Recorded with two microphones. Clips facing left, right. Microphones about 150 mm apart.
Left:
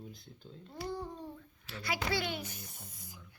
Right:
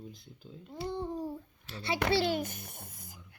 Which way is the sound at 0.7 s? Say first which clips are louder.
Right 3 dB; 25° right (ahead or behind).